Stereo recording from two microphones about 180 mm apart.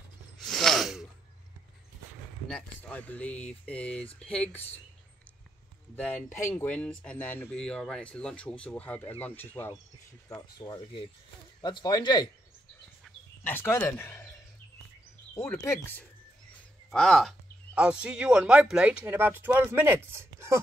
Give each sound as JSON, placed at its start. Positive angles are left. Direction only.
{"t": 0.4, "sound": "a sound", "side_deg": 0}
{"t": 2.4, "sound": "speech", "side_deg": 5}
{"t": 5.9, "sound": "speech", "side_deg": 10}
{"t": 10.3, "sound": "speech", "side_deg": 25}
{"t": 13.0, "sound": "a sound", "side_deg": 10}
{"t": 15.3, "sound": "speech", "side_deg": 15}